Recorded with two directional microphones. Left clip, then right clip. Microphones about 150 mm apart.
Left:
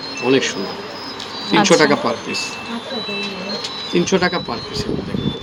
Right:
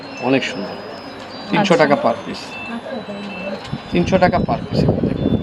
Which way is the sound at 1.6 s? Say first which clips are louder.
Right 1 dB; 30° right (ahead or behind).